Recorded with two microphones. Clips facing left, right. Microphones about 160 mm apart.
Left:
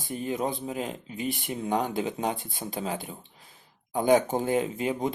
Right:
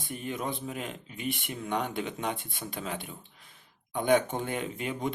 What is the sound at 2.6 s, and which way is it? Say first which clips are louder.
Speech: left 4 dB; 25° left (ahead or behind).